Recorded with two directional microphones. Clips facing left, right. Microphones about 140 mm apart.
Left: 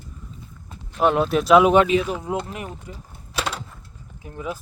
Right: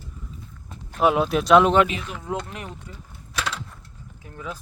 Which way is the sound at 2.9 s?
15° left (ahead or behind).